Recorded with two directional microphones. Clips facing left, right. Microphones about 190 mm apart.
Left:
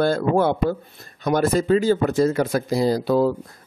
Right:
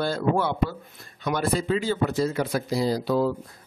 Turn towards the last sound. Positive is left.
turn(degrees=50)  # may be behind; listen again after turning